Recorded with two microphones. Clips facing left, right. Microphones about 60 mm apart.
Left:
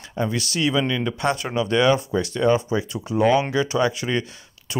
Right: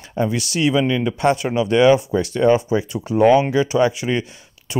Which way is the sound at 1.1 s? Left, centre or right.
Right.